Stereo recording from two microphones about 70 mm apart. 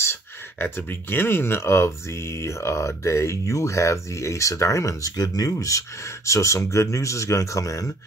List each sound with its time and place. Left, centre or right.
0.0 s speech: left